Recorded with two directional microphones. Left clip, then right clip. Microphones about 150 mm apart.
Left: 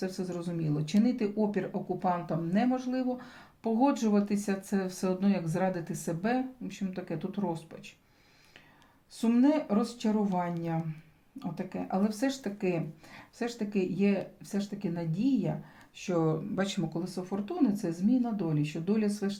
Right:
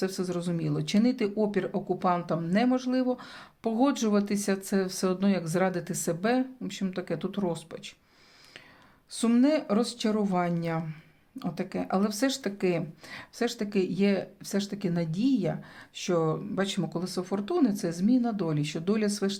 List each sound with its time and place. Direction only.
0.0 s speech: 35° right (ahead or behind)
9.1 s speech: 40° right (ahead or behind)
16.2 s speech: 15° right (ahead or behind)
16.9 s speech: 35° right (ahead or behind)